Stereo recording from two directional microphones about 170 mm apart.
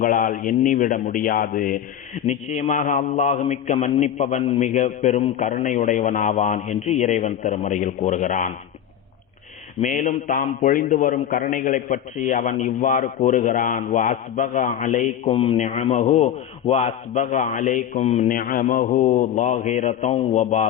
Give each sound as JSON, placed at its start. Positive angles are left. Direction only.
{"t": 0.0, "sound": "speech", "side_deg": 50}
{"t": 9.8, "sound": "speech", "side_deg": 45}
{"t": 15.3, "sound": "speech", "side_deg": 30}